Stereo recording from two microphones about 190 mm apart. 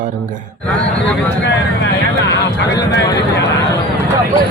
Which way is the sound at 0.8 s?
5° left (ahead or behind).